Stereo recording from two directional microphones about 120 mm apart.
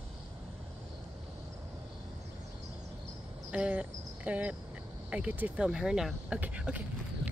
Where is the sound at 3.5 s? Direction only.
10° right (ahead or behind).